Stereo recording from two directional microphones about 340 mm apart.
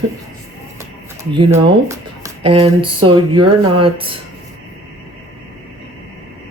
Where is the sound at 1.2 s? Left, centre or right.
Centre.